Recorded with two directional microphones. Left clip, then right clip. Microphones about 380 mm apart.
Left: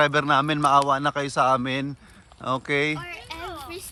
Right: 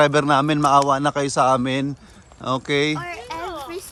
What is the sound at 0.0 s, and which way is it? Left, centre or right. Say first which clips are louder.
Speech: right 4 dB; centre.